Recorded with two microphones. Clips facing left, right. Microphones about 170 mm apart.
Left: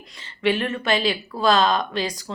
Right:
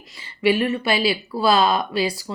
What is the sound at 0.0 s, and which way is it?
Speech, 5° right (ahead or behind).